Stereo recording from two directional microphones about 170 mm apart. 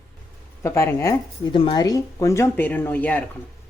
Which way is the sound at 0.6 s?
15° left (ahead or behind).